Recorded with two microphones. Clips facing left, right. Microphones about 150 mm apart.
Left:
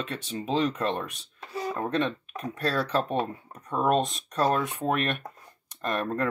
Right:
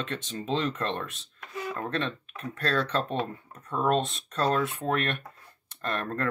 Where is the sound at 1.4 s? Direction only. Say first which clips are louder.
Left 3 dB; 35° left (ahead or behind).